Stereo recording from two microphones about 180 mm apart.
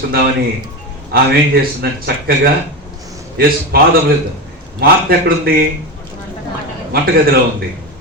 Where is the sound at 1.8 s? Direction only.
60° right (ahead or behind).